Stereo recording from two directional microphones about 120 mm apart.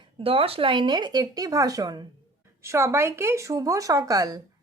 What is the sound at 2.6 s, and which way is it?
Speech, 25° right (ahead or behind).